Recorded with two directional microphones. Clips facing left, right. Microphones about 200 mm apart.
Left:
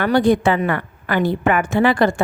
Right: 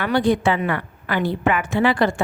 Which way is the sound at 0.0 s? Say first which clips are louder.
Left 3 dB; 45° left (ahead or behind).